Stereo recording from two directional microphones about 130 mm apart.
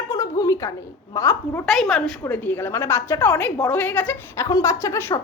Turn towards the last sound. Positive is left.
turn(degrees=20)  # may be behind; listen again after turning